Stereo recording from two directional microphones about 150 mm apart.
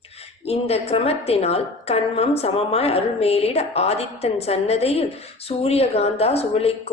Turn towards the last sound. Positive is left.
turn(degrees=40)  # may be behind; listen again after turning